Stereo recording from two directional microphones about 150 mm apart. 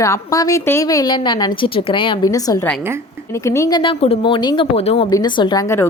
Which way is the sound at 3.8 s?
40° left (ahead or behind).